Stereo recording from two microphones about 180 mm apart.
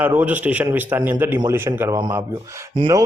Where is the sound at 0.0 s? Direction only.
10° right (ahead or behind).